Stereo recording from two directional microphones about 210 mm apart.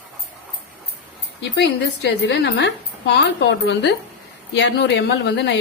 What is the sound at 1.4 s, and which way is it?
A woman's voice, 55° left (ahead or behind).